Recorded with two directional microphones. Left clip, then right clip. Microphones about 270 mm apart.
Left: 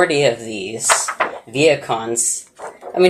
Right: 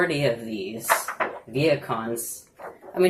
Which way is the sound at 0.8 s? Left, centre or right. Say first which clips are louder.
Left 7 dB; left.